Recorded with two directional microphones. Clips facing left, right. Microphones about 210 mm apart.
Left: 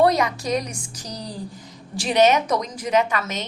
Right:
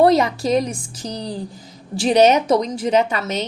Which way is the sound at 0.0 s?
30° right (ahead or behind).